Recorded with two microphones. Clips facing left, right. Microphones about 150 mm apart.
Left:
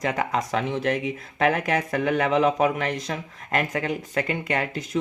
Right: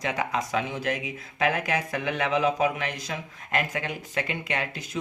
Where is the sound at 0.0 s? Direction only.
45° left (ahead or behind).